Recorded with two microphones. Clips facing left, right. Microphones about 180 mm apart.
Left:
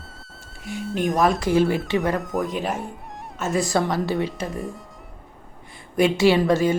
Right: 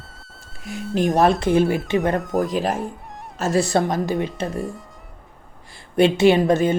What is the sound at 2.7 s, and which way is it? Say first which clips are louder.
Music: right 3 dB; centre (ahead or behind).